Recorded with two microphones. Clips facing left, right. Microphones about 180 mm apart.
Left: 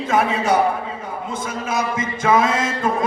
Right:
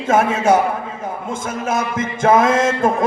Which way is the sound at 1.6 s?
50° right (ahead or behind).